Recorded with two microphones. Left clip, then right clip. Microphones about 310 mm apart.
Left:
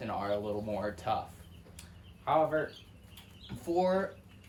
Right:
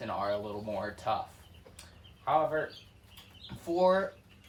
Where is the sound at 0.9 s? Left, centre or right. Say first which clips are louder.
Right 3 dB; centre.